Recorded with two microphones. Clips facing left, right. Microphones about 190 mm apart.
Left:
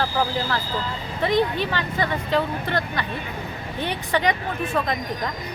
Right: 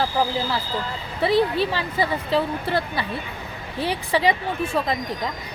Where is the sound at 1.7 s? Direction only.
5° right (ahead or behind).